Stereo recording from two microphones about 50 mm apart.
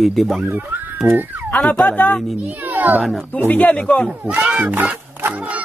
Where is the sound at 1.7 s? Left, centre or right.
Left.